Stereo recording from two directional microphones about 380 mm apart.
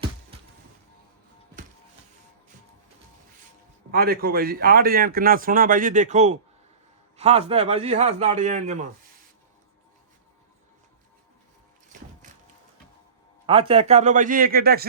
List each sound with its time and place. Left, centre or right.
3.9 s a man's voice: right
13.5 s speech: centre